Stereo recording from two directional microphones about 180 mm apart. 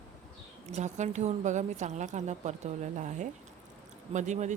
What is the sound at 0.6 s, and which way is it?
A woman's voice, 40° right (ahead or behind).